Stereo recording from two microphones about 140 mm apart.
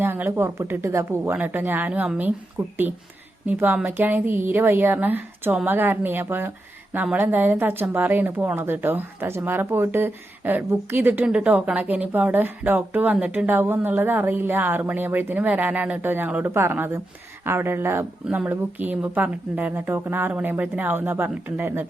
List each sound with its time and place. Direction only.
0.0 s a woman's voice: 15° right (ahead or behind)
2.6 s speech: 25° right (ahead or behind)
3.4 s a woman's voice: 10° right (ahead or behind)